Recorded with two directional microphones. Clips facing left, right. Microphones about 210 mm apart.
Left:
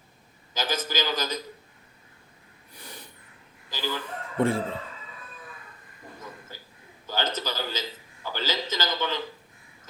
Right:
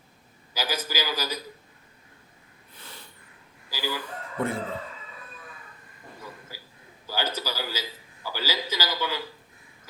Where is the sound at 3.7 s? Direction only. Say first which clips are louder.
Even; 10° right (ahead or behind).